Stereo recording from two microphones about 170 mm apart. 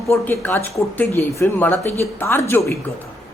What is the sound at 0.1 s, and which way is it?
A man's voice, 10° left (ahead or behind).